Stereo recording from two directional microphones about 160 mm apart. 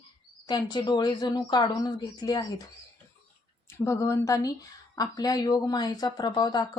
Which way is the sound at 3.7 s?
20° left (ahead or behind).